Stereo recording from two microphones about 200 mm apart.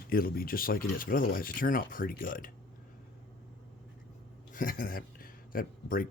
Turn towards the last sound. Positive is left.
turn(degrees=45)  # may be behind; listen again after turning